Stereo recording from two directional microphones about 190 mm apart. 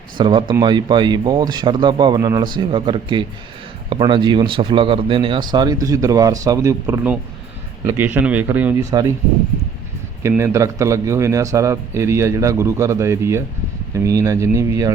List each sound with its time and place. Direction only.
0.2 s speech: 25° right (ahead or behind)
10.2 s speech: 15° right (ahead or behind)